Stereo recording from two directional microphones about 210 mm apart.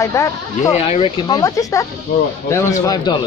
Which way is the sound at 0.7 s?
30° left (ahead or behind).